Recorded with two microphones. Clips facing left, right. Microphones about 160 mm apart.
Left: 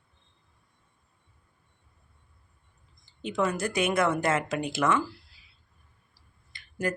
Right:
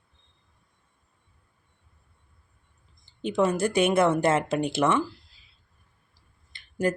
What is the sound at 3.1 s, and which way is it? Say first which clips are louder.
Speech: right 4 dB; 30° right (ahead or behind).